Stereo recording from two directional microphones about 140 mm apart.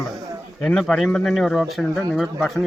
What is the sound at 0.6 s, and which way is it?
Speech, 5° left (ahead or behind).